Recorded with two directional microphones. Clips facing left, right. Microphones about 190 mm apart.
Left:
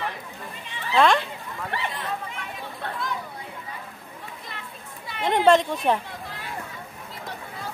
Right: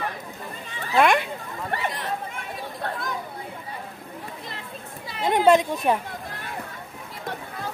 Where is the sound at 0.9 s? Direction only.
10° right (ahead or behind).